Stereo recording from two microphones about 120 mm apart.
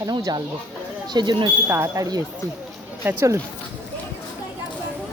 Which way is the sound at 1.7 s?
25° right (ahead or behind).